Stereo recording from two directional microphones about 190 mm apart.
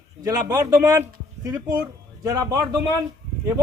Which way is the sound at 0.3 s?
20° right (ahead or behind).